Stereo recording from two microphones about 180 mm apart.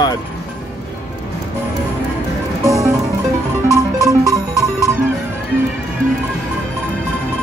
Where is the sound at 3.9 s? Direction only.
20° right (ahead or behind).